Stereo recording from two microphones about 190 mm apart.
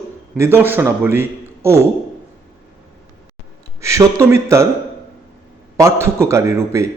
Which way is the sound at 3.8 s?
15° right (ahead or behind).